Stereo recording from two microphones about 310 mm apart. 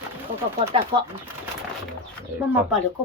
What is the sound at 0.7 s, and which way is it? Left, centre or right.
Speech, centre.